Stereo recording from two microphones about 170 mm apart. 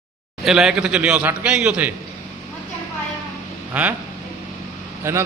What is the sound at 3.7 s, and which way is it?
Speech, 10° right (ahead or behind).